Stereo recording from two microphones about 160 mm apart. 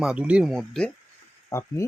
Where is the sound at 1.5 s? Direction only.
15° left (ahead or behind).